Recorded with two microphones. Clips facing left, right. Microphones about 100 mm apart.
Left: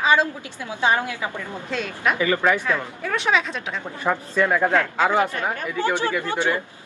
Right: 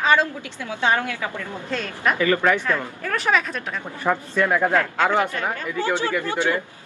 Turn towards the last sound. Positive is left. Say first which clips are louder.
# even
turn(degrees=20)  # may be behind; listen again after turning